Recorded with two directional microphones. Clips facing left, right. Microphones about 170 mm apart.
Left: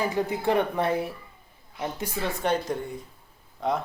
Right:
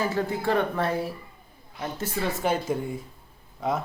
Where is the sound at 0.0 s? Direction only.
15° left (ahead or behind).